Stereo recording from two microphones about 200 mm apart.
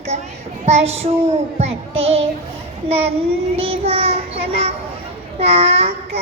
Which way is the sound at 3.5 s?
30° right (ahead or behind).